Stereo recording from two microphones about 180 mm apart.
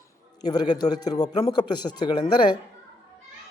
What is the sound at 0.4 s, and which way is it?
A man's voice, 25° left (ahead or behind).